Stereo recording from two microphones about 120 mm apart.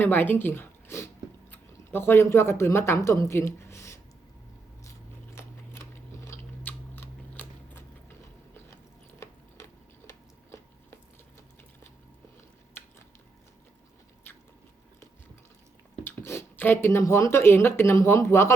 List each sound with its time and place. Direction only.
0.0 s speech: 15° left (ahead or behind)
4.8 s biting: 25° left (ahead or behind)
10.1 s a sound: 20° left (ahead or behind)
16.0 s speech: 20° left (ahead or behind)